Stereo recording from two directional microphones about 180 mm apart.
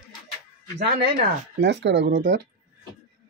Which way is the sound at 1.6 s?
75° right (ahead or behind).